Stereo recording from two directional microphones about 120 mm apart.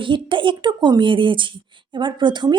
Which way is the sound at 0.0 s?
45° right (ahead or behind).